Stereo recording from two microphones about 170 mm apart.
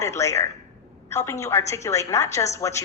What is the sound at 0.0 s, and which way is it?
A woman's voice, 15° left (ahead or behind).